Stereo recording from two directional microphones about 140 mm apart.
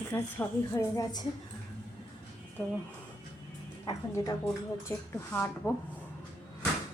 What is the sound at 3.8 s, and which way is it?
Speech, 25° left (ahead or behind).